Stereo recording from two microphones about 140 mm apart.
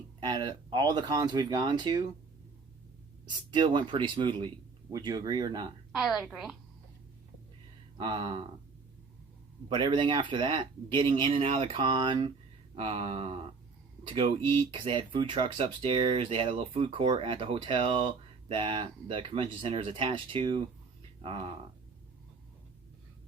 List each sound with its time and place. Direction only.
0.2 s speech: 35° right (ahead or behind)
3.2 s speech: 35° right (ahead or behind)
5.9 s a woman's voice: centre (ahead or behind)
7.9 s speech: 40° right (ahead or behind)
9.6 s speech: 35° right (ahead or behind)
12.7 s speech: 45° right (ahead or behind)